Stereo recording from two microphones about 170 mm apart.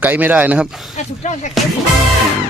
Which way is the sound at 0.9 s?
45° left (ahead or behind).